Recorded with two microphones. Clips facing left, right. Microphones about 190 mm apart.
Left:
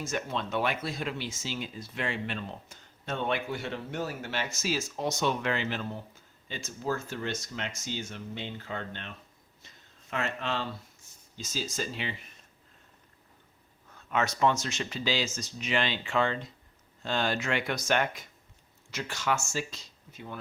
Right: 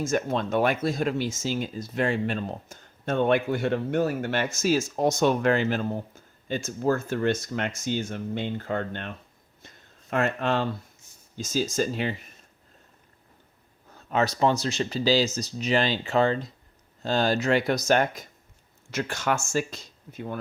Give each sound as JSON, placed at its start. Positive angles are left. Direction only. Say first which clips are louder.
{"t": 0.0, "sound": "speech", "louder": "right 7 dB", "side_deg": -45}
{"t": 13.9, "sound": "speech", "louder": "right 5 dB", "side_deg": -35}
{"t": 18.9, "sound": "speech", "louder": "right 4 dB", "side_deg": -55}